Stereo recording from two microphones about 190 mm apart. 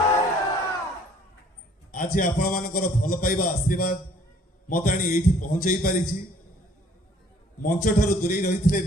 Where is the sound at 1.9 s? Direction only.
45° left (ahead or behind).